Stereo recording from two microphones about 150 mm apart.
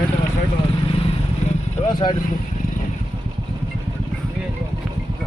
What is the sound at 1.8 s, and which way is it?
Vehicle, 45° left (ahead or behind).